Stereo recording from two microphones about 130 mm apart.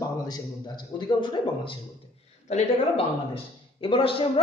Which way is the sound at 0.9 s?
35° left (ahead or behind).